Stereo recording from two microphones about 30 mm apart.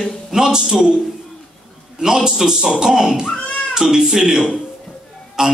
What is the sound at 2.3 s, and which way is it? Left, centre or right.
A man's voice, centre.